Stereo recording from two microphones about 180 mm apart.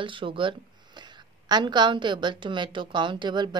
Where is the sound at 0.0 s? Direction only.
30° right (ahead or behind).